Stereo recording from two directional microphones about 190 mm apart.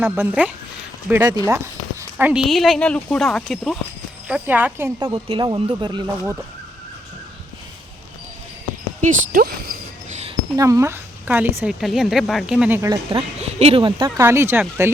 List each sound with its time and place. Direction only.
0.0 s a woman's voice: 10° right (ahead or behind)
1.1 s speech: 20° right (ahead or behind); by 3.8 s centre (ahead or behind)
4.3 s a woman's voice: 10° right (ahead or behind)
4.9 s speech: 25° right (ahead or behind)
9.0 s cricket: 50° right (ahead or behind)
10.6 s a woman's voice: 15° right (ahead or behind)
13.1 s speech: 30° right (ahead or behind)
14.2 s a woman's voice: 15° right (ahead or behind)